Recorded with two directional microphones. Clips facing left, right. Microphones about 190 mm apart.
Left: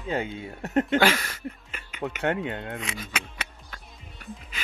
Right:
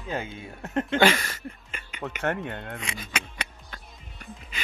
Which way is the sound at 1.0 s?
Centre (ahead or behind).